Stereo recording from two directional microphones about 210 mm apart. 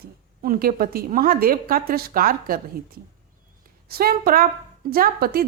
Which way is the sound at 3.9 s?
45° right (ahead or behind).